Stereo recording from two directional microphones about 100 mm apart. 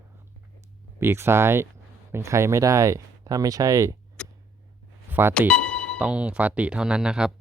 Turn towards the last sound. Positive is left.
turn(degrees=-10)  # may be behind; listen again after turning